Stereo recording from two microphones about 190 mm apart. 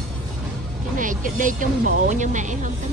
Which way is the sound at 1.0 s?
45° right (ahead or behind).